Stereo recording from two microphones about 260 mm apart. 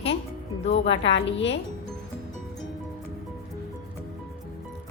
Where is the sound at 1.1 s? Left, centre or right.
Left.